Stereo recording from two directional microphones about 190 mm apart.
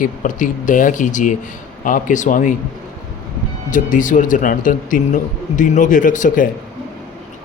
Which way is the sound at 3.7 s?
45° left (ahead or behind).